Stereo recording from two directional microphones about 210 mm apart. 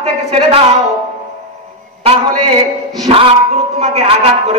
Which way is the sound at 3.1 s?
30° right (ahead or behind).